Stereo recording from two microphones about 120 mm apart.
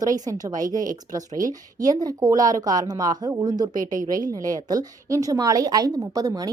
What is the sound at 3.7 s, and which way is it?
Speech, 90° right.